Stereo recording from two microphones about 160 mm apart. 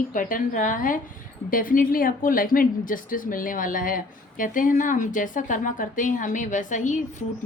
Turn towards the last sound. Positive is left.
turn(degrees=50)  # may be behind; listen again after turning